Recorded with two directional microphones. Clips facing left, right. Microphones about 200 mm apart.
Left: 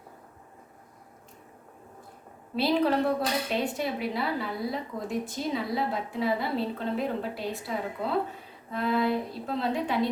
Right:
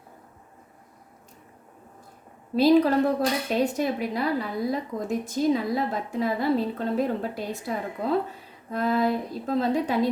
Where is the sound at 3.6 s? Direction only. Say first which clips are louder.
Right 5 dB; 45° right (ahead or behind).